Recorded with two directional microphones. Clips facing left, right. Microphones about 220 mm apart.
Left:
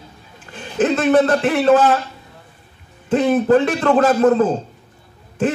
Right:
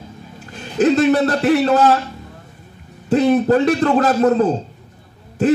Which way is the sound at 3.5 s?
40° right (ahead or behind).